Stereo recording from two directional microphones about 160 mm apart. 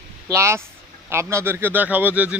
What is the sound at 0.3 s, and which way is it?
Speech, 15° right (ahead or behind).